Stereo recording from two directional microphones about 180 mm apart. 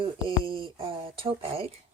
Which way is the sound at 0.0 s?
30° right (ahead or behind).